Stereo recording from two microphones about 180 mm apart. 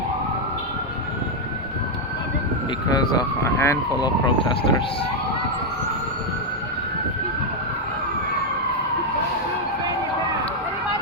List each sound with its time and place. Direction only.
2.9 s speech: 15° left (ahead or behind)